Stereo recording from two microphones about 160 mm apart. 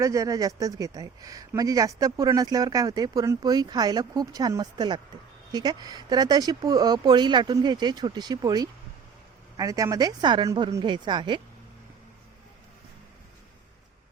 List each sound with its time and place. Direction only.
0.0 s speech: 20° right (ahead or behind)